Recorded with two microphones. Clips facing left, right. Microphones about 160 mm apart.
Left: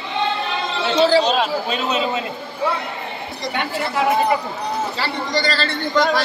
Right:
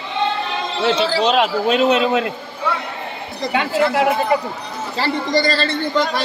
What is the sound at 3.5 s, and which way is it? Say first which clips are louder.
Speech: right 6 dB; 90° right.